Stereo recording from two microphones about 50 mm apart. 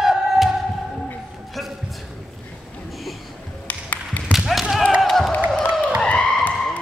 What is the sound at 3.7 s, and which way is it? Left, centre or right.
Music, left.